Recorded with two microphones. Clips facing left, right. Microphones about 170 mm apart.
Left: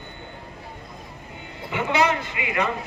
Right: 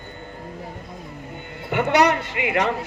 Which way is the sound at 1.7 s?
65° right (ahead or behind).